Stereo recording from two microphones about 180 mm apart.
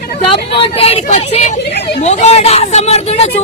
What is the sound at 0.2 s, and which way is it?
Speech, 30° left (ahead or behind).